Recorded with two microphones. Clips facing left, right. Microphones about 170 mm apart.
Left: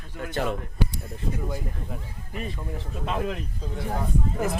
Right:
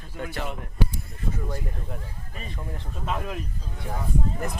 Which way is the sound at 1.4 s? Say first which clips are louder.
Left 1 dB; 5° left (ahead or behind).